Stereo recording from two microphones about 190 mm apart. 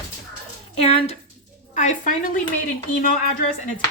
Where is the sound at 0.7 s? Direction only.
30° left (ahead or behind).